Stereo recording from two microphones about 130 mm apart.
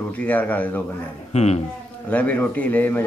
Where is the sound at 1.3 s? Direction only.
55° left (ahead or behind).